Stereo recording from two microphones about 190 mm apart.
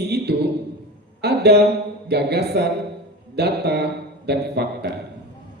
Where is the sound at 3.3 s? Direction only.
60° right (ahead or behind).